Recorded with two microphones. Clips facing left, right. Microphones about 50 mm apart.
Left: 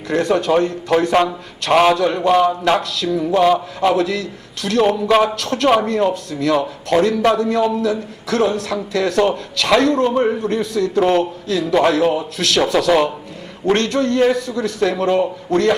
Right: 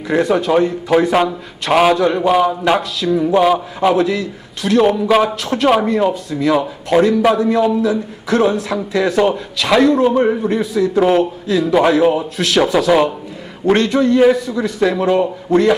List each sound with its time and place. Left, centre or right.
0.1 s a man's voice: centre
5.4 s speech: centre